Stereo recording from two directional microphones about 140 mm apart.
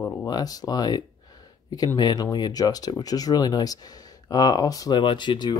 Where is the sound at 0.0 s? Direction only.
25° left (ahead or behind).